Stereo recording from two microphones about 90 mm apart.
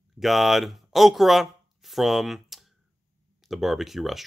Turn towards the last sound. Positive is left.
turn(degrees=0)  # may be behind; listen again after turning